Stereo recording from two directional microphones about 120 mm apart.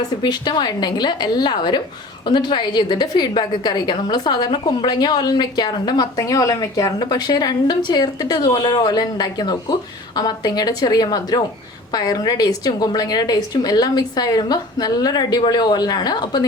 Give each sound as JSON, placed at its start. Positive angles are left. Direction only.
{"t": 0.2, "sound": "a woman's voice", "side_deg": 35}